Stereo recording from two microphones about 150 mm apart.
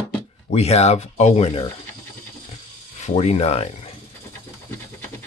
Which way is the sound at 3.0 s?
45° left (ahead or behind).